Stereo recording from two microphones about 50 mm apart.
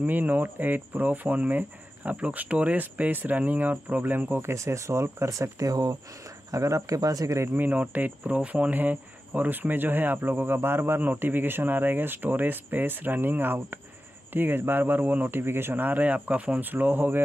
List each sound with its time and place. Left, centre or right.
0.0 s speech: right
4.4 s speech: right
6.2 s a sound: right
7.2 s speech: right
7.5 s speech: right
16.6 s speech: right